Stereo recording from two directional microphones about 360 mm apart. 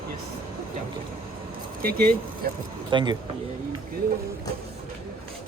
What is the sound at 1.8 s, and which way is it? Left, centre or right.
Speech, right.